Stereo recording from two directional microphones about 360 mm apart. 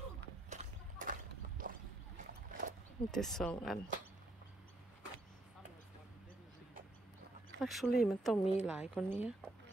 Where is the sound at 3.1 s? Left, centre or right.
Centre.